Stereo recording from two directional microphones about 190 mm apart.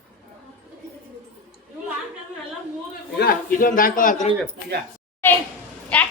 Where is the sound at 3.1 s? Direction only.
50° left (ahead or behind).